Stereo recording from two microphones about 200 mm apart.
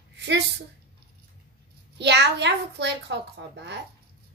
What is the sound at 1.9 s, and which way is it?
A woman's voice, 60° right (ahead or behind).